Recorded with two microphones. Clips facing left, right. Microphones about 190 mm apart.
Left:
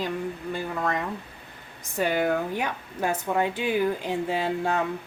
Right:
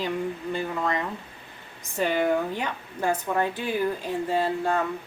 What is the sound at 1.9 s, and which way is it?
A woman's voice, 5° left (ahead or behind).